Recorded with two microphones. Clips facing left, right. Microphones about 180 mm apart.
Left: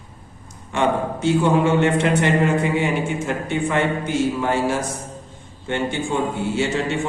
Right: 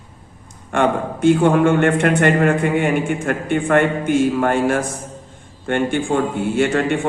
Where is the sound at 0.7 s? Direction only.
55° right (ahead or behind).